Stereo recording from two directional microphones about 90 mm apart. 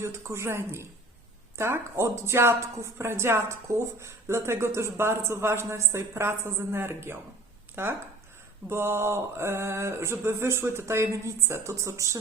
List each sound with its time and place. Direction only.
0.0 s mantra: 30° right (ahead or behind)
1.5 s a woman's voice: 30° right (ahead or behind)
8.7 s mantra: 30° right (ahead or behind)